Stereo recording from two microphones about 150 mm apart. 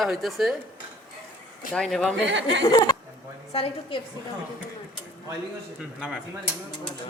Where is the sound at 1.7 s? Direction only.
5° left (ahead or behind).